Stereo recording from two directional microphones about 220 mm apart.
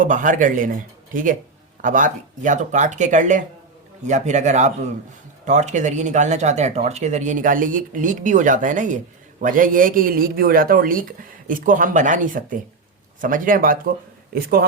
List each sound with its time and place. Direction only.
0.0 s speech: 35° right (ahead or behind)